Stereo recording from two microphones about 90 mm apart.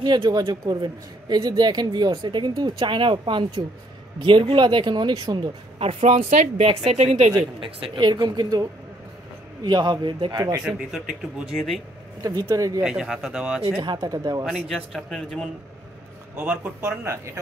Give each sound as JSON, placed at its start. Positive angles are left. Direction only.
{"t": 0.0, "sound": "a woman's voice", "side_deg": -45}
{"t": 5.8, "sound": "speech", "side_deg": -90}
{"t": 7.6, "sound": "a woman's voice", "side_deg": -70}
{"t": 10.6, "sound": "a man's voice", "side_deg": -5}
{"t": 11.5, "sound": "a man's voice", "side_deg": 5}
{"t": 12.2, "sound": "speech", "side_deg": -45}
{"t": 12.8, "sound": "a man's voice", "side_deg": -5}
{"t": 13.8, "sound": "speech", "side_deg": -45}
{"t": 14.4, "sound": "a man's voice", "side_deg": 0}
{"t": 16.3, "sound": "speech", "side_deg": -20}